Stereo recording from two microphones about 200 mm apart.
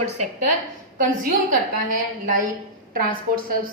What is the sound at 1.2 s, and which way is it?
A woman's voice, 45° right (ahead or behind).